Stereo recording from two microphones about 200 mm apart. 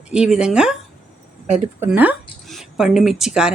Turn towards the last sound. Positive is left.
turn(degrees=-5)  # may be behind; listen again after turning